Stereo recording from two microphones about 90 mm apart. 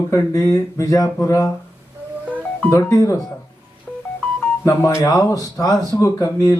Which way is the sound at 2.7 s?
30° left (ahead or behind).